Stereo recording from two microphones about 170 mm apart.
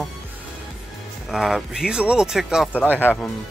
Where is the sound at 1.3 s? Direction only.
5° right (ahead or behind).